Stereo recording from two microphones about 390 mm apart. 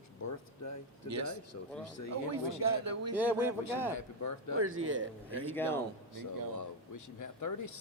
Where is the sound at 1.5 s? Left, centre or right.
Left.